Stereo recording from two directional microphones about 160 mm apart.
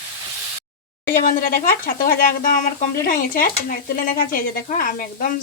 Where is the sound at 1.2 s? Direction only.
60° left (ahead or behind).